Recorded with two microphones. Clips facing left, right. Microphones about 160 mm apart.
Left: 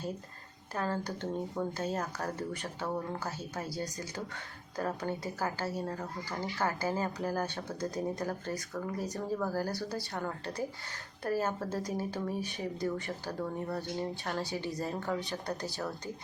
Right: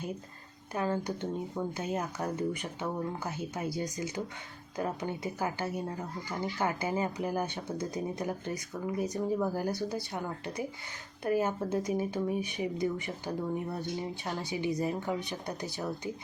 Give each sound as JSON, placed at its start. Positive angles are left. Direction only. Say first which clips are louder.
{"t": 0.7, "sound": "speech", "louder": "right 3 dB", "side_deg": -20}